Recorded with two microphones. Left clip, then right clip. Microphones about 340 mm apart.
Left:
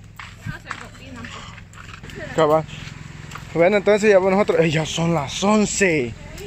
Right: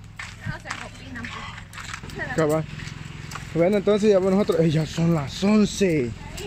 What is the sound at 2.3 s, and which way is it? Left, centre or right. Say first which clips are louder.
Speech: left 6 dB; left.